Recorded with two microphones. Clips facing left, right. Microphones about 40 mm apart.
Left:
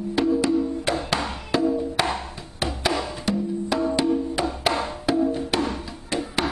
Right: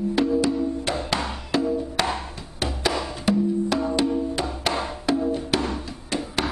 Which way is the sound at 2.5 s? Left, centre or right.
Centre.